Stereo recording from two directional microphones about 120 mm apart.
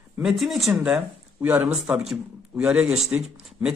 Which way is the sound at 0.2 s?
Centre (ahead or behind).